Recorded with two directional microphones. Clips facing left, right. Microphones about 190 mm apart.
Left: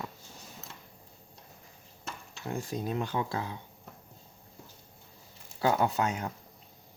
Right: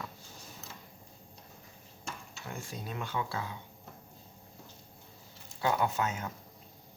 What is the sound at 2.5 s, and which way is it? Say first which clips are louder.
Speech: left 8 dB; 40° left (ahead or behind).